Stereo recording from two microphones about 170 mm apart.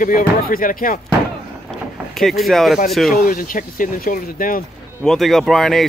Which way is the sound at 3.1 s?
55° left (ahead or behind).